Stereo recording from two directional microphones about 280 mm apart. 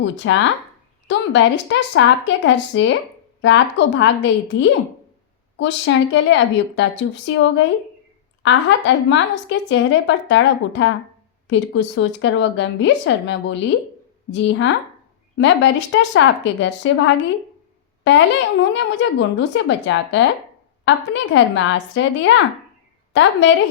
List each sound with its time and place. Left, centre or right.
0.0 s a woman's voice: left
18.0 s a woman's voice: left